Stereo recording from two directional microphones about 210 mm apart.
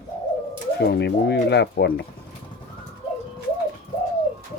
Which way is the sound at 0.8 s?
50° left (ahead or behind).